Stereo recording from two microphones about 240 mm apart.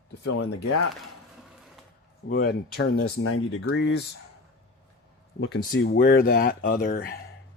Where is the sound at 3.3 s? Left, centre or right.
Left.